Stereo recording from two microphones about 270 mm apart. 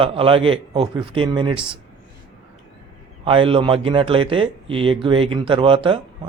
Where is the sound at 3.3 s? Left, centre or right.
Centre.